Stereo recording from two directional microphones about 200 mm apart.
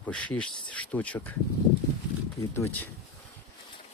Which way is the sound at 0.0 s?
5° left (ahead or behind).